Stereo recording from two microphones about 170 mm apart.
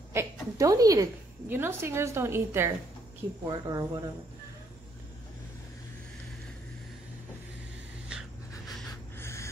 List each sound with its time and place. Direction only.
0.1 s a sound: 15° right (ahead or behind)
1.5 s a woman's voice: 15° right (ahead or behind)
8.1 s dog: 5° right (ahead or behind)
9.2 s snort: 15° left (ahead or behind)